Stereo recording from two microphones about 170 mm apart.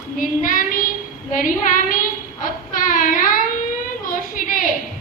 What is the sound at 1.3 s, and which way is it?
Speech, 50° left (ahead or behind).